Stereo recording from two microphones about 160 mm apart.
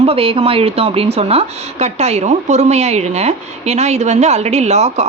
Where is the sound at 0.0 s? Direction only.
35° right (ahead or behind).